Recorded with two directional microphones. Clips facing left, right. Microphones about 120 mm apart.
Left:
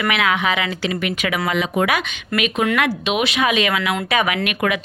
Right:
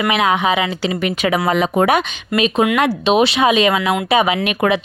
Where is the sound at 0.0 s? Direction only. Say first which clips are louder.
Right 4 dB; 25° right (ahead or behind).